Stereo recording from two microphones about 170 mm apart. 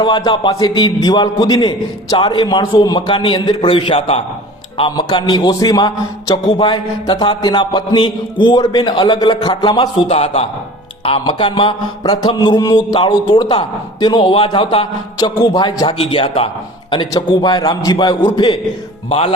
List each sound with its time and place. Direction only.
0.0 s a man's voice: 25° left (ahead or behind)
10.1 s a man's voice: 35° left (ahead or behind)
19.0 s a man's voice: 40° left (ahead or behind)